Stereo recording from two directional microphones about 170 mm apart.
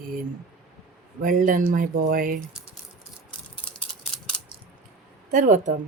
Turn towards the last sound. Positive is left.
turn(degrees=-50)  # may be behind; listen again after turning